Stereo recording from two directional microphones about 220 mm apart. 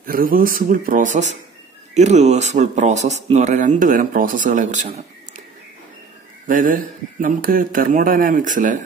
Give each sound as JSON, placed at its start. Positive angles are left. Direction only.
{"t": 0.0, "sound": "speech", "side_deg": -40}
{"t": 6.4, "sound": "speech", "side_deg": -40}